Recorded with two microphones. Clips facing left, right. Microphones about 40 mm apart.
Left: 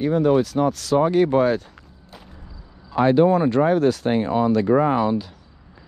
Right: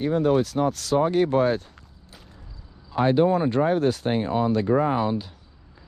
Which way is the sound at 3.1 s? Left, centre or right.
Left.